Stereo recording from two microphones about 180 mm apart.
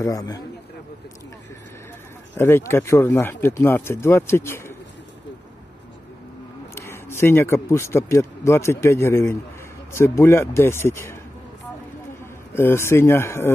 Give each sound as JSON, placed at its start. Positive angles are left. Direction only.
{"t": 0.0, "sound": "a man's voice", "side_deg": 20}
{"t": 2.3, "sound": "speech", "side_deg": 10}
{"t": 6.7, "sound": "speech", "side_deg": 15}
{"t": 12.5, "sound": "speech", "side_deg": 15}